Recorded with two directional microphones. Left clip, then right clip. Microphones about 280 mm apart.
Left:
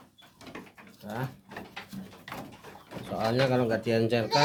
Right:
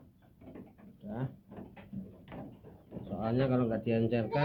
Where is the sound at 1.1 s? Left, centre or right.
Left.